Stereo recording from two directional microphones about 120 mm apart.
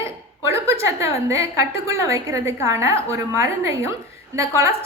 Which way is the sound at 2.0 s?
25° right (ahead or behind).